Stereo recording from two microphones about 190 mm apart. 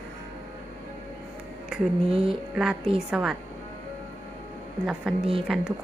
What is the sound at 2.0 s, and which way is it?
Speech, 30° right (ahead or behind).